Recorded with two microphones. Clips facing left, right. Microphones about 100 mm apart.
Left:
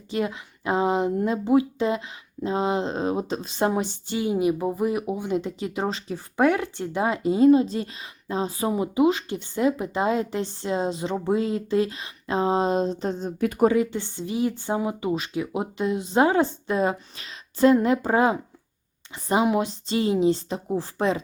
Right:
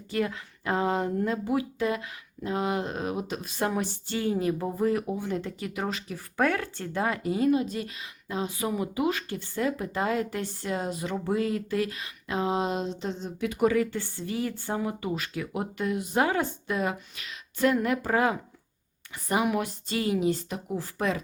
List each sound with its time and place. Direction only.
0.1 s speech: 20° left (ahead or behind); by 13.7 s 45° left (ahead or behind)
13.7 s speech: 20° left (ahead or behind)